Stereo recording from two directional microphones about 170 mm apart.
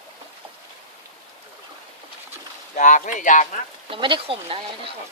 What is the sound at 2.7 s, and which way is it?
Speech, 45° left (ahead or behind).